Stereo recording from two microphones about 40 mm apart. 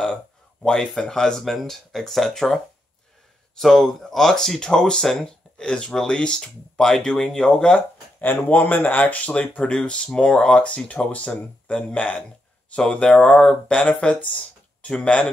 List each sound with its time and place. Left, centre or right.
0.0 s speech: centre
1.4 s speech: centre
8.2 s speech: left
9.6 s speech: left